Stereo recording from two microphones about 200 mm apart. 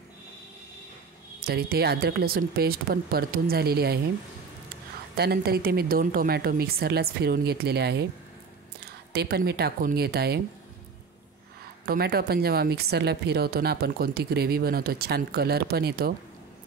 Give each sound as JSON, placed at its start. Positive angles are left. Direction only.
{"t": 1.4, "sound": "a woman's voice", "side_deg": -50}
{"t": 5.1, "sound": "a woman's voice", "side_deg": -55}
{"t": 9.1, "sound": "a woman's voice", "side_deg": -55}
{"t": 11.8, "sound": "a woman's voice", "side_deg": -50}